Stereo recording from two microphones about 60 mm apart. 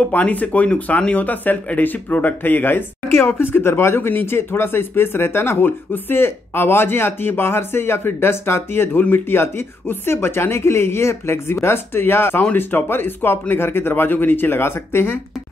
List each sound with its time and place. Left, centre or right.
0.1 s speech: left